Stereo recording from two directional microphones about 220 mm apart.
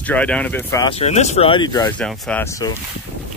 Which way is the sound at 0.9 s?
30° left (ahead or behind).